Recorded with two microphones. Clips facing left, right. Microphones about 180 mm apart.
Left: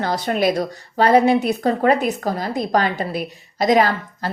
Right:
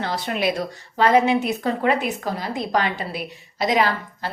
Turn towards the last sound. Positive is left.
turn(degrees=45)  # may be behind; listen again after turning